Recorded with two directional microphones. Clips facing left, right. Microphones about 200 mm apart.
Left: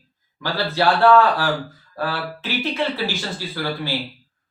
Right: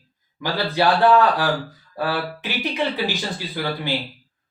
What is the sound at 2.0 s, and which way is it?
Speech, 15° right (ahead or behind).